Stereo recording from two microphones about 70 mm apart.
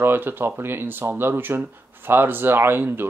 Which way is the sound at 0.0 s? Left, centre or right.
Right.